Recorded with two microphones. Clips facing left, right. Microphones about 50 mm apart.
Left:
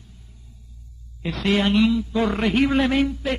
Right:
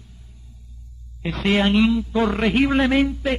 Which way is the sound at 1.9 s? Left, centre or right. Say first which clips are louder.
Right 1 dB; centre.